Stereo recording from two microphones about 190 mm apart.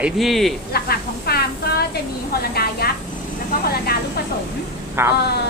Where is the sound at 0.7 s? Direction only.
55° left (ahead or behind).